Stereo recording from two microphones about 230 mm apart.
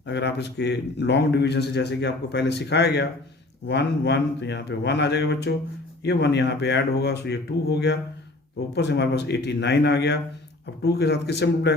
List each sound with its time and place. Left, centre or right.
0.0 s speech: left